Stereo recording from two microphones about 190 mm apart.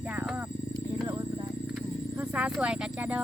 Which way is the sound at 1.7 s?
5° right (ahead or behind).